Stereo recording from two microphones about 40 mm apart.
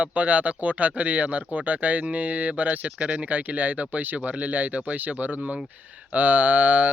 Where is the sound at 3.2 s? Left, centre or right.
Right.